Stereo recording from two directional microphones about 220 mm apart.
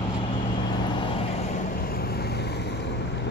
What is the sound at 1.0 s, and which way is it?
Vehicle, 25° left (ahead or behind).